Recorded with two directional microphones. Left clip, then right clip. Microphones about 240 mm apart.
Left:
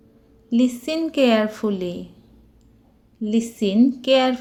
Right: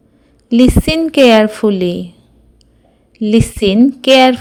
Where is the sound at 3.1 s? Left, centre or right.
Right.